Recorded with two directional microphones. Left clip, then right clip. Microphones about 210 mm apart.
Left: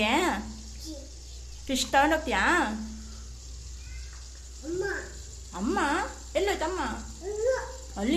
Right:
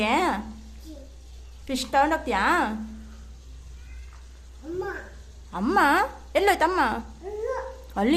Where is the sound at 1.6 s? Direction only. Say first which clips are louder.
Right 1 dB; 5° right (ahead or behind).